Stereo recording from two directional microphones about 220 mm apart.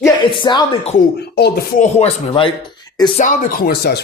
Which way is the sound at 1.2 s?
45° left (ahead or behind).